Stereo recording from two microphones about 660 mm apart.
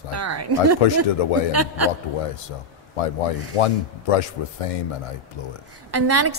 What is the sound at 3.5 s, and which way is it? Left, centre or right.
Speech, left.